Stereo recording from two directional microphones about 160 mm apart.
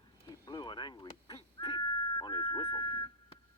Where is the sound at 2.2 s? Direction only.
25° left (ahead or behind).